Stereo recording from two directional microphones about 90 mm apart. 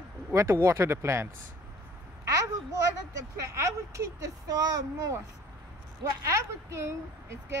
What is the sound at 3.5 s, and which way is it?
Speech, 35° right (ahead or behind).